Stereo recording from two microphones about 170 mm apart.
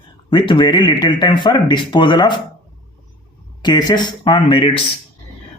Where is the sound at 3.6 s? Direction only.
25° left (ahead or behind).